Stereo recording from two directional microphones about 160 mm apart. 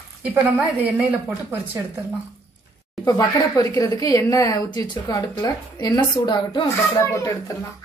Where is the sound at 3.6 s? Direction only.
20° left (ahead or behind).